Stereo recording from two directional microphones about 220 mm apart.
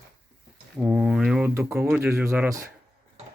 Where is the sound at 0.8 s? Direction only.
5° right (ahead or behind).